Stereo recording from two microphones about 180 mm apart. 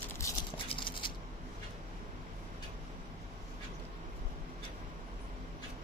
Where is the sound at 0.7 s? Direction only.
30° left (ahead or behind).